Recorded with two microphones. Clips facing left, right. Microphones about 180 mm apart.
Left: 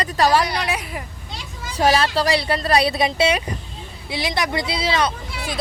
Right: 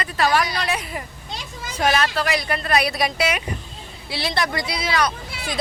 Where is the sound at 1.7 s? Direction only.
35° left (ahead or behind).